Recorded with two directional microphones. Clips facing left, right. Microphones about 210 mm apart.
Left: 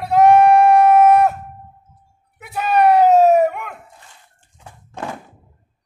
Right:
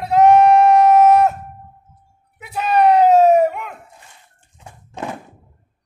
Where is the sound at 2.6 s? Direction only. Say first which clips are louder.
Even; 5° left (ahead or behind).